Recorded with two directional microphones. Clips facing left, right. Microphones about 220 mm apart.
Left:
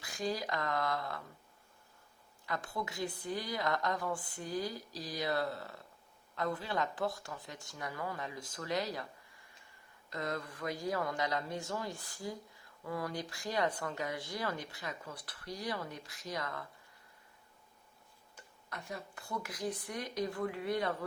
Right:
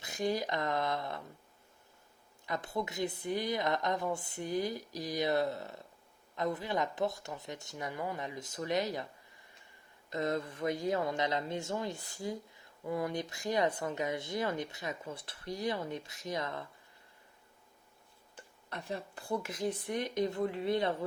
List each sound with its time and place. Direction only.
0.0 s speech: 20° right (ahead or behind)
2.5 s speech: 20° right (ahead or behind)
10.1 s speech: 25° right (ahead or behind)
18.3 s speech: 30° right (ahead or behind)